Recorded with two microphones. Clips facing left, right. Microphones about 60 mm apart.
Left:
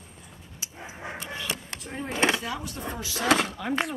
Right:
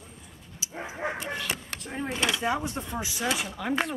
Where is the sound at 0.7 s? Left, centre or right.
Right.